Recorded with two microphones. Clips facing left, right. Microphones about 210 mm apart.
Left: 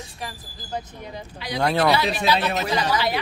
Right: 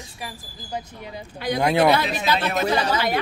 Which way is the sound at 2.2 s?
50° right (ahead or behind).